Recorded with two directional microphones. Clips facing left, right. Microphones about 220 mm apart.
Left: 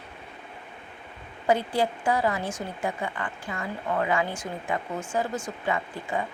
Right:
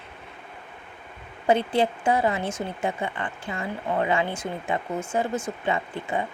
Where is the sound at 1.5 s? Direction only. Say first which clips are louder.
Right 3 dB; 25° right (ahead or behind).